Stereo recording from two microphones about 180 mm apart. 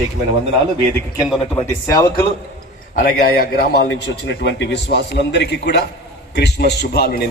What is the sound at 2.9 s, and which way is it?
A man's voice, 55° left (ahead or behind).